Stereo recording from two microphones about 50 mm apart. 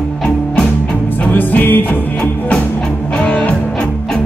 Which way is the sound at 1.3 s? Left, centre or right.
Left.